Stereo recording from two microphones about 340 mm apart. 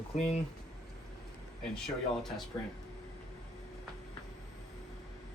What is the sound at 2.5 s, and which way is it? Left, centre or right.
Speech, centre.